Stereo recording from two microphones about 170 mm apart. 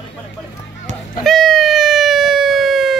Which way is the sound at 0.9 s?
40° right (ahead or behind).